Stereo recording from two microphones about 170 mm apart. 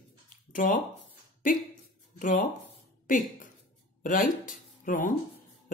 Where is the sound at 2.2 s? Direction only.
50° left (ahead or behind).